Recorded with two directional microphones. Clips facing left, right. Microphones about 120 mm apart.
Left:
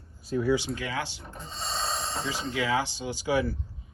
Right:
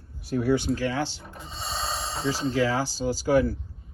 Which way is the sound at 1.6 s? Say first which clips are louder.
Right 1 dB; centre (ahead or behind).